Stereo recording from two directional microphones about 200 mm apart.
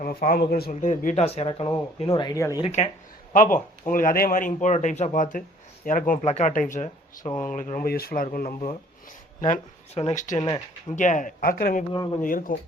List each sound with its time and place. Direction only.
0.0 s speech: 45° left (ahead or behind); by 2.5 s 20° left (ahead or behind)
2.6 s speech: 30° left (ahead or behind)
3.3 s speech: 40° left (ahead or behind)
9.4 s speech: 35° left (ahead or behind)
10.3 s speech: 20° left (ahead or behind)
10.9 s speech: 40° left (ahead or behind)